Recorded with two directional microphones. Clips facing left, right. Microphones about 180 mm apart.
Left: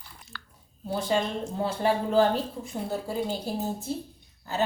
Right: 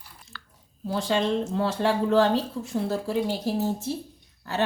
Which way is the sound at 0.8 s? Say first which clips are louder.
Right 2 dB; 90° right.